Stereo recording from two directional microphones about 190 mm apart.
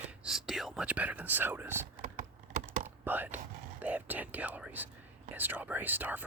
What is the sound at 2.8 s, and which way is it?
Whispering, 10° right (ahead or behind).